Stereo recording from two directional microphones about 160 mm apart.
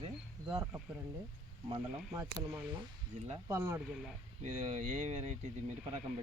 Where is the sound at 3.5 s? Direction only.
15° right (ahead or behind).